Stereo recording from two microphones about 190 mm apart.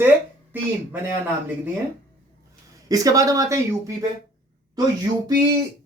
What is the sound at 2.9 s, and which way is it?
Speech, 20° right (ahead or behind).